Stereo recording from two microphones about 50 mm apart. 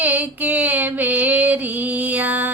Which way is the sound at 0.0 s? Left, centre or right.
Right.